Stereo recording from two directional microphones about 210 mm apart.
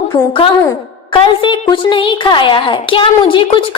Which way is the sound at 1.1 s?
25° left (ahead or behind).